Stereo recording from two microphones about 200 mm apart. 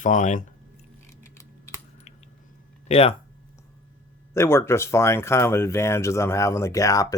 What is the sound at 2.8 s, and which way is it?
Speech, 30° left (ahead or behind).